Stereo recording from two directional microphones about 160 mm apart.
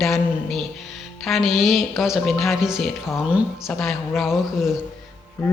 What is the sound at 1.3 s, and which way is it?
A woman's voice, centre (ahead or behind).